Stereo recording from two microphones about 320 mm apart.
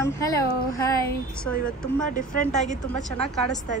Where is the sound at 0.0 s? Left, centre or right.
Centre.